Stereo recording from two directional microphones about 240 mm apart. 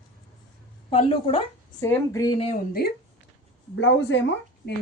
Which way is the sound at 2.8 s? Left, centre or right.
Left.